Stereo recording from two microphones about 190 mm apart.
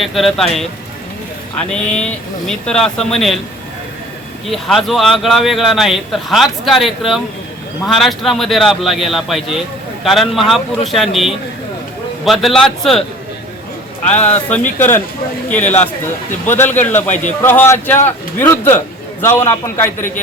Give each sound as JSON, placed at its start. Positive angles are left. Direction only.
{"t": 0.0, "sound": "speech", "side_deg": 0}
{"t": 4.4, "sound": "speech", "side_deg": 0}
{"t": 12.2, "sound": "speech", "side_deg": 0}
{"t": 14.1, "sound": "a man's voice", "side_deg": 10}